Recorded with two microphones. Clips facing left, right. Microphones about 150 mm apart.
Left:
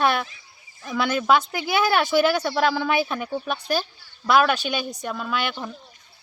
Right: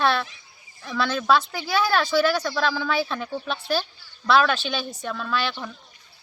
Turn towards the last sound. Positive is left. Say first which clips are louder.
# even
turn(degrees=15)  # may be behind; listen again after turning